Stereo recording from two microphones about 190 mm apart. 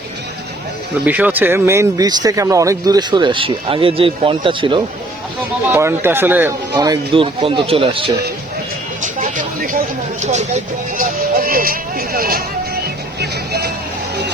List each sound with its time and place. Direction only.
1.0 s speech: 10° right (ahead or behind); by 4.8 s 25° right (ahead or behind)
5.7 s speech: 10° right (ahead or behind); by 8.1 s 30° right (ahead or behind)
9.0 s a sound: 40° right (ahead or behind)
10.2 s vehicle: 35° right (ahead or behind); by 13.7 s 60° right (ahead or behind)